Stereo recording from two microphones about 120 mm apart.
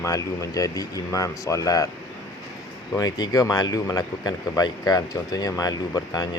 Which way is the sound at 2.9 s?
30° left (ahead or behind).